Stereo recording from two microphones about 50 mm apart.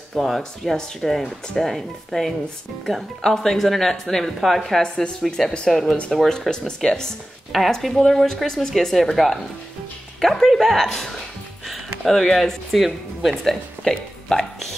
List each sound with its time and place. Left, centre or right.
0.1 s speech: centre
0.4 s speech: centre
1.0 s a woman's voice: centre
4.8 s speech: centre
5.7 s a woman's voice: centre
11.6 s music: centre
12.1 s speech: centre
12.7 s speech: centre
13.3 s speech: centre